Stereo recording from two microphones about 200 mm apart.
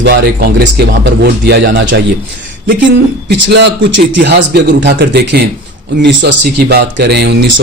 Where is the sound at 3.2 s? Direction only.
60° right (ahead or behind).